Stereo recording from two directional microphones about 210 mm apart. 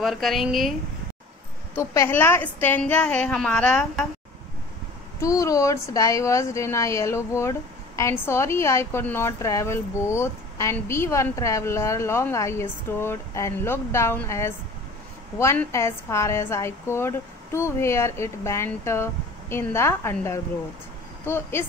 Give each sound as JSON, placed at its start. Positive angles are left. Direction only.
{"t": 0.0, "sound": "speech", "side_deg": 0}
{"t": 1.8, "sound": "a woman's voice", "side_deg": 10}
{"t": 5.2, "sound": "a woman's voice", "side_deg": 15}